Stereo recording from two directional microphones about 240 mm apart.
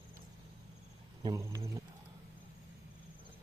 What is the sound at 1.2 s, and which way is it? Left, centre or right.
Speech, centre.